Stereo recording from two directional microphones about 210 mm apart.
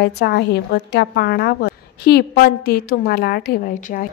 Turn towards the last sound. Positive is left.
turn(degrees=40)  # may be behind; listen again after turning